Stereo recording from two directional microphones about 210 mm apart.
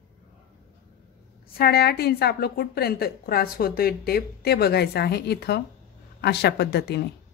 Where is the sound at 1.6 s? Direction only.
50° left (ahead or behind).